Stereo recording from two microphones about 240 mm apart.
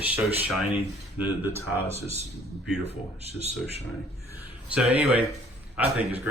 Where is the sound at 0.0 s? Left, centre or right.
Centre.